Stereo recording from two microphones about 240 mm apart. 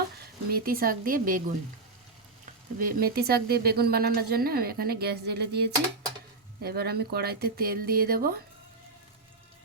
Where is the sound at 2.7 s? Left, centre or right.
Right.